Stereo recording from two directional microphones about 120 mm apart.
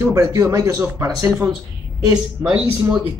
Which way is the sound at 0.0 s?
30° right (ahead or behind).